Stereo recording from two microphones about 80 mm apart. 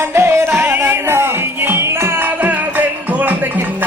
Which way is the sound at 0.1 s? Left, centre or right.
Right.